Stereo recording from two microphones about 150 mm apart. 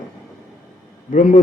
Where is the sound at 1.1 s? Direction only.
60° left (ahead or behind).